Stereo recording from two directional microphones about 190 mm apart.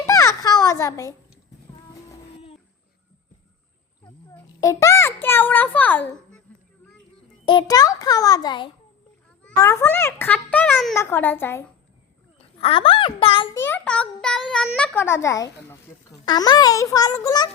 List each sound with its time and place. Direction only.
0.1 s a sound: 15° left (ahead or behind)
4.0 s a child's voice: 20° left (ahead or behind)
7.4 s a child's voice: 20° left (ahead or behind)
12.5 s a child's voice: 30° left (ahead or behind)
13.6 s a child's voice: 10° left (ahead or behind)